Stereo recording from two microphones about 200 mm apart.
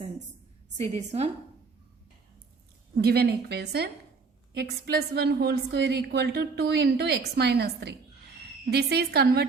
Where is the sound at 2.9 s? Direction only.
55° right (ahead or behind).